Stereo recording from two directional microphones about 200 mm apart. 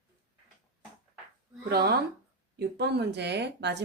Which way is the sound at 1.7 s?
50° right (ahead or behind).